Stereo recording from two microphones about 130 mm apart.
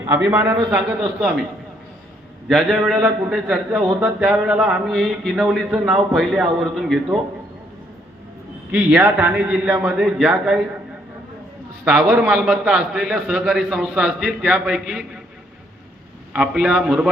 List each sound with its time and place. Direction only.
0.0 s a man's voice: 20° right (ahead or behind)
2.5 s a man's voice: centre (ahead or behind)
8.7 s a man's voice: 10° right (ahead or behind)
11.9 s a man's voice: 10° right (ahead or behind)
16.3 s a man's voice: 5° right (ahead or behind)